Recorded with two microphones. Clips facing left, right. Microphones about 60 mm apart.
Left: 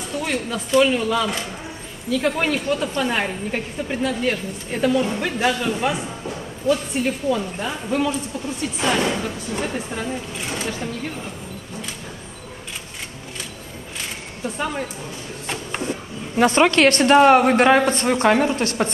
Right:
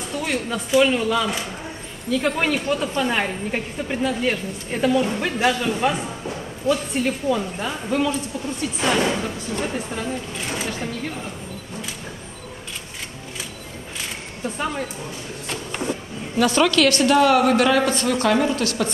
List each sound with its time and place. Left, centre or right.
0.1 s a woman's voice: centre
7.2 s a woman's voice: centre
14.4 s a woman's voice: centre
15.4 s a sound: left
16.3 s a woman's voice: left